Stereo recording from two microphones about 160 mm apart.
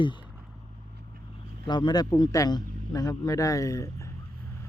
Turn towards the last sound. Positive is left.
turn(degrees=20)  # may be behind; listen again after turning